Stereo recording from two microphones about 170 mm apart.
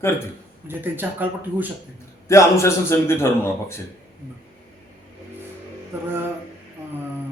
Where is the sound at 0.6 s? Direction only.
10° right (ahead or behind).